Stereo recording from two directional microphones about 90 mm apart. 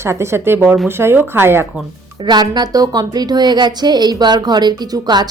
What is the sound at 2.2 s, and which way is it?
A woman's voice, 55° right (ahead or behind).